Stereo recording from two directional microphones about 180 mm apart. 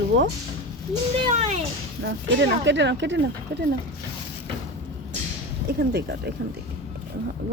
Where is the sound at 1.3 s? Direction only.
40° right (ahead or behind).